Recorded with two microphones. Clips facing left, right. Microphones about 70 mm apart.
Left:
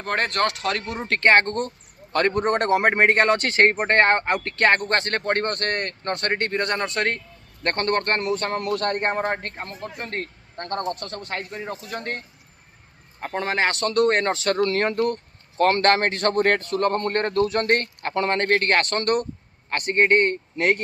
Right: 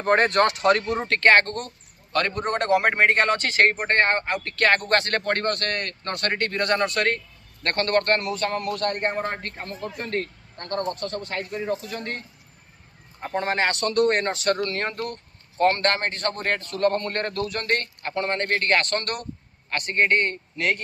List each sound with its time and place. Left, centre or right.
0.0 s speech: centre
1.0 s speech: centre
2.1 s a man's voice: left
3.8 s speech: left
4.4 s a man's voice: left
10.7 s speech: left
11.3 s a man's voice: left
13.4 s speech: left
14.7 s speech: left
17.5 s speech: left
18.1 s speech: left